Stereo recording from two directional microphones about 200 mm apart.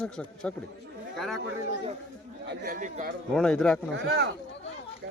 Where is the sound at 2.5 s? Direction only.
45° right (ahead or behind).